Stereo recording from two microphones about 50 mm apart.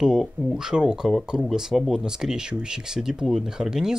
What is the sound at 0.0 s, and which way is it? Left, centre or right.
Speech, centre.